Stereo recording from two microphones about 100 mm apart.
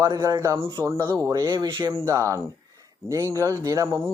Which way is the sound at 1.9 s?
30° right (ahead or behind).